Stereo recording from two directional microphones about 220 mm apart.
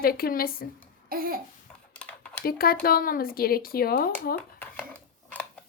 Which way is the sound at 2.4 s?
40° left (ahead or behind).